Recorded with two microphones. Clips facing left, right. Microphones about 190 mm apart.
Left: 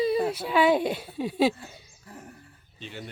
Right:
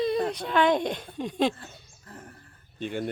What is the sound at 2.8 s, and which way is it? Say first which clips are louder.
Speech: right 9 dB; 50° right (ahead or behind).